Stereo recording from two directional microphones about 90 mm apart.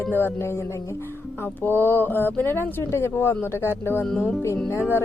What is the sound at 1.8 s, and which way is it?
Speech, 20° left (ahead or behind).